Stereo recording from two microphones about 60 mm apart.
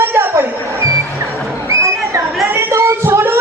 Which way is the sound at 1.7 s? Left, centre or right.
Right.